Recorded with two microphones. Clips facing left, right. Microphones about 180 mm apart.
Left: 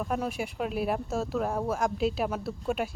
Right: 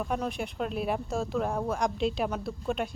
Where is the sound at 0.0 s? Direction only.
5° left (ahead or behind).